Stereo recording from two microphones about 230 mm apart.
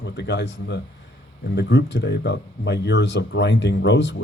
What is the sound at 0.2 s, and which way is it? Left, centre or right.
Speech, left.